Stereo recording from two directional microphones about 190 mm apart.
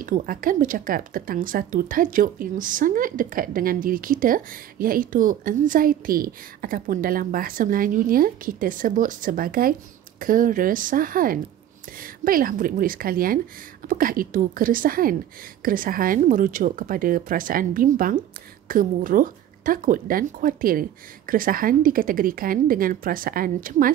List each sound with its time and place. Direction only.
0.0 s a woman's voice: 45° right (ahead or behind)